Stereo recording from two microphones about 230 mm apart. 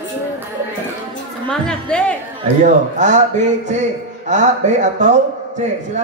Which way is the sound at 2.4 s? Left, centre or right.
Right.